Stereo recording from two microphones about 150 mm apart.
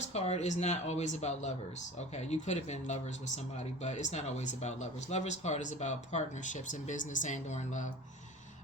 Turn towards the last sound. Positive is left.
turn(degrees=55)  # may be behind; listen again after turning